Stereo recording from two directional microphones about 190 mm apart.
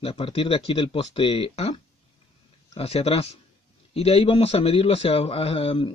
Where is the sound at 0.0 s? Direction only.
30° left (ahead or behind).